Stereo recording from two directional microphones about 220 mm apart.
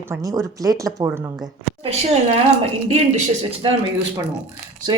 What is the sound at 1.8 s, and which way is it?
Speech, 30° right (ahead or behind).